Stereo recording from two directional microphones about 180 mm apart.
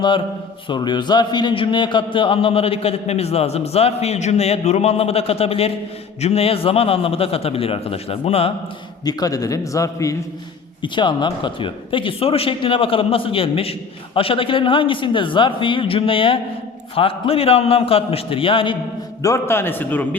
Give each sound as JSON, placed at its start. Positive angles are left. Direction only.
{"t": 0.7, "sound": "a man's voice", "side_deg": 25}
{"t": 9.0, "sound": "a man's voice", "side_deg": 20}
{"t": 19.2, "sound": "a man's voice", "side_deg": 15}